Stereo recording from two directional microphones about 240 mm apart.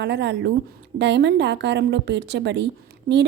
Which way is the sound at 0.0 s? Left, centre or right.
Right.